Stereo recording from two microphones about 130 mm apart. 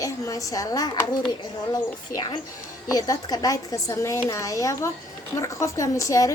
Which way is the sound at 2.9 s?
30° left (ahead or behind).